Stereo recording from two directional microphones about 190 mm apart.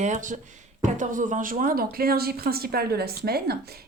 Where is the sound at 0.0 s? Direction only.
40° right (ahead or behind).